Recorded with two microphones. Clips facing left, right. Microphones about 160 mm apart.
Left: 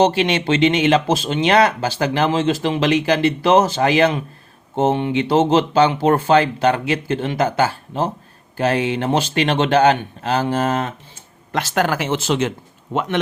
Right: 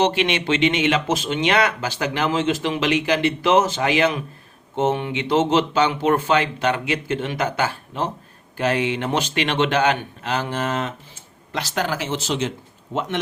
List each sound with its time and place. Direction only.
0.0 s speech: 35° left (ahead or behind)
11.5 s speech: 55° left (ahead or behind)